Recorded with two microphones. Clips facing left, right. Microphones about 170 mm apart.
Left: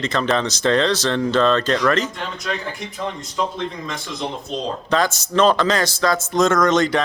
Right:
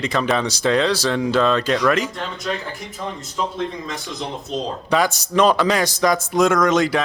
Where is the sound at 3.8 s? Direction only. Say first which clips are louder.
Left 1 dB; centre (ahead or behind).